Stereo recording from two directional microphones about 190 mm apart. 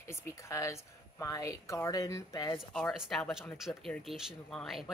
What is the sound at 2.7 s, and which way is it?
Speech, centre (ahead or behind).